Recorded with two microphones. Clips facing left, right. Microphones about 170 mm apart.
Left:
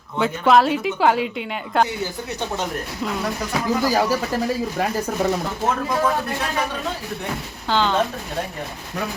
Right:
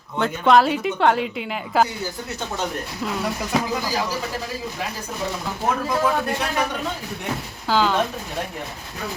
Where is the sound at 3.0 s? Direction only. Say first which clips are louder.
Left 1 dB; centre (ahead or behind).